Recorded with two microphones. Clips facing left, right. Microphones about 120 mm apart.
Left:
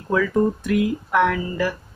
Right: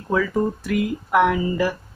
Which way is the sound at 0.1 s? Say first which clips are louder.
Left 2 dB; 5° right (ahead or behind).